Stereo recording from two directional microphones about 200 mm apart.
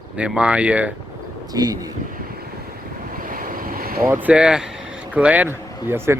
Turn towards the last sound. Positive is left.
turn(degrees=-10)  # may be behind; listen again after turning